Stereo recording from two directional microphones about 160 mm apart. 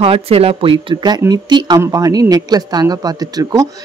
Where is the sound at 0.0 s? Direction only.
35° right (ahead or behind).